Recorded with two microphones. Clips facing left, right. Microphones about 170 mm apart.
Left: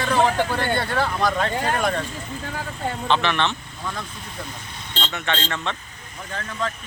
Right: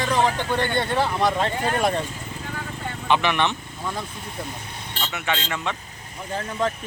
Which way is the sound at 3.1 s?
15° right (ahead or behind).